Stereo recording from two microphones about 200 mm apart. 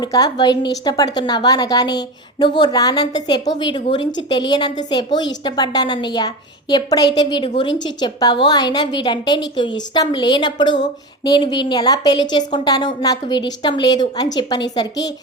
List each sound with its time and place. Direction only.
0.0 s a woman's voice: 20° left (ahead or behind)